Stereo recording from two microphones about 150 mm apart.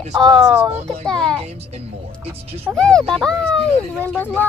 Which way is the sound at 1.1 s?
5° left (ahead or behind).